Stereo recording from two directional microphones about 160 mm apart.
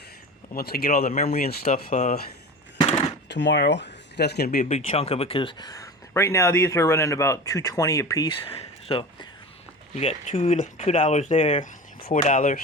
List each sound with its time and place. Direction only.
0.5 s speech: 70° left (ahead or behind); by 2.1 s 55° left (ahead or behind)
3.2 s speech: 90° left; by 4.7 s 70° left (ahead or behind)
4.7 s speech: 40° left (ahead or behind)
11.6 s speech: 55° left (ahead or behind)